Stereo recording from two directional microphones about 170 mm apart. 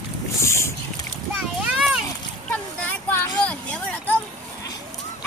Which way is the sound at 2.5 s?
10° left (ahead or behind).